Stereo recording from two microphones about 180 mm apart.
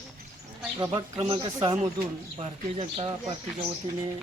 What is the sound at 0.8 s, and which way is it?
Speech, 20° right (ahead or behind).